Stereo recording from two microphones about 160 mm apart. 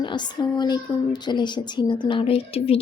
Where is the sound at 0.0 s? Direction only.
30° left (ahead or behind).